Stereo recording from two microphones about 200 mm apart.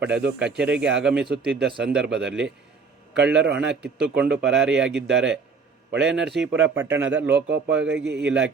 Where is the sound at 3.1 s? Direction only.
60° right (ahead or behind).